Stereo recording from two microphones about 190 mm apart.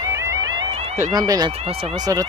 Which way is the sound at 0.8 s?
35° right (ahead or behind).